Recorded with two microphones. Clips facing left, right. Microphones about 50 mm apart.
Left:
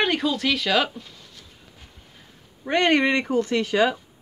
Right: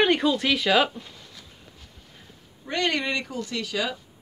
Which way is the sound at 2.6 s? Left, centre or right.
Left.